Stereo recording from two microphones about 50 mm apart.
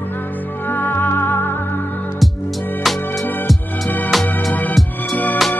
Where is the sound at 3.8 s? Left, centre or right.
Left.